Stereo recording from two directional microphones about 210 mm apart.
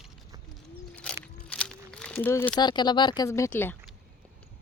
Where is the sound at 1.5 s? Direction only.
5° left (ahead or behind).